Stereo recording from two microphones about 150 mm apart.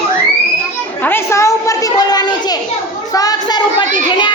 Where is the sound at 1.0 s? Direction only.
15° left (ahead or behind).